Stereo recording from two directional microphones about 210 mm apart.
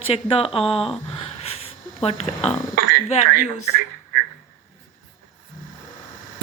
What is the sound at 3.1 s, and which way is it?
Speech, 35° left (ahead or behind).